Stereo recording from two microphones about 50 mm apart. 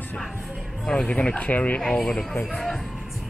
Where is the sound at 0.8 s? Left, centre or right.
Centre.